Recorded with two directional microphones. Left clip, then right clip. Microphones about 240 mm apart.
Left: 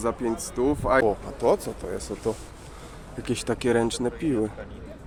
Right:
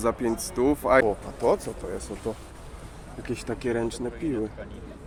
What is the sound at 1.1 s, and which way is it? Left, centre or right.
Speech, centre.